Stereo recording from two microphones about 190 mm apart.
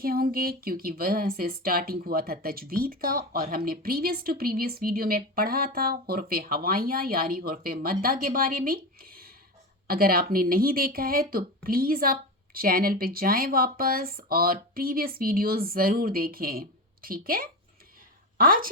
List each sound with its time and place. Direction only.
0.0 s speech: 50° right (ahead or behind)